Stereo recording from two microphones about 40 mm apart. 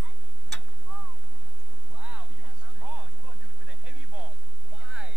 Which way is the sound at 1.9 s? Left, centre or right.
Right.